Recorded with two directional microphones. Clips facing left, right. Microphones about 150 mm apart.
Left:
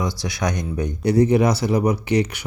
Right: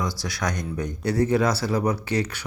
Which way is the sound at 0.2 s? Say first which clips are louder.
Left 4 dB; 20° left (ahead or behind).